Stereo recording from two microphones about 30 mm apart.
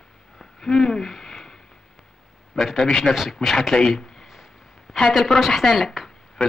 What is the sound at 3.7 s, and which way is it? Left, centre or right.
Speech, centre.